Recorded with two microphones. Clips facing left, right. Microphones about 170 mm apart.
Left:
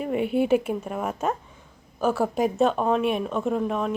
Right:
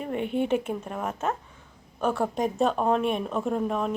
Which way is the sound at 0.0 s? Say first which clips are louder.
Left 4 dB; 10° left (ahead or behind).